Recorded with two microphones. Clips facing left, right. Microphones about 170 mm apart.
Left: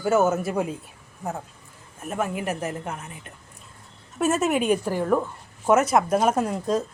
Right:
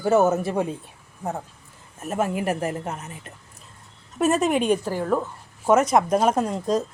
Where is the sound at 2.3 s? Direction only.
10° right (ahead or behind).